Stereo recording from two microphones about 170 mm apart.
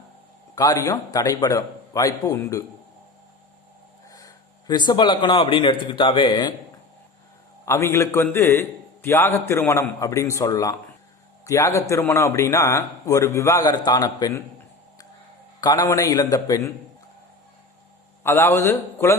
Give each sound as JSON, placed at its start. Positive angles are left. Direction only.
{"t": 0.5, "sound": "a man's voice", "side_deg": 20}
{"t": 4.1, "sound": "a man's voice", "side_deg": 20}
{"t": 7.6, "sound": "a man's voice", "side_deg": 15}
{"t": 15.6, "sound": "a man's voice", "side_deg": 20}
{"t": 18.2, "sound": "a man's voice", "side_deg": 15}